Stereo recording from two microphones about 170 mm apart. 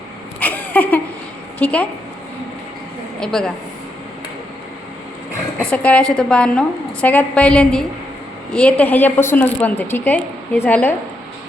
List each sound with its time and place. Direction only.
0.3 s a sound: 10° left (ahead or behind)
1.5 s a woman's voice: 10° left (ahead or behind)
3.2 s a woman's voice: 5° left (ahead or behind)
5.6 s a woman's voice: 10° left (ahead or behind)